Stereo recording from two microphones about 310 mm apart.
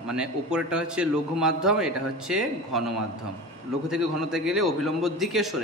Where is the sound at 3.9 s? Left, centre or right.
Centre.